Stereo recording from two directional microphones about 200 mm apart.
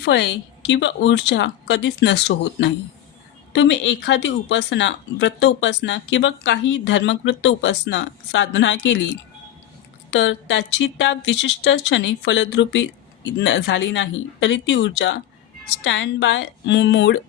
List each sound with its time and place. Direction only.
0.0 s speech: 60° left (ahead or behind)
10.1 s speech: 65° left (ahead or behind)